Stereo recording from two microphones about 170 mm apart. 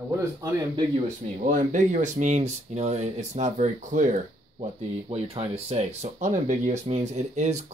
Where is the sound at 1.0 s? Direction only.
50° right (ahead or behind).